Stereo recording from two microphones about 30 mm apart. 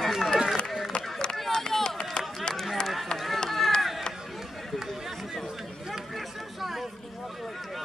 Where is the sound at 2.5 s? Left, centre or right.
Left.